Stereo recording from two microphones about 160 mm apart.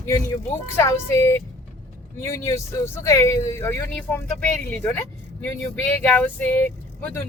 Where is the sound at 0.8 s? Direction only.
15° left (ahead or behind).